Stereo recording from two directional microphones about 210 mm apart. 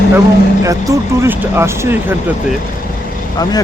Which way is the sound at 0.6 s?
15° right (ahead or behind).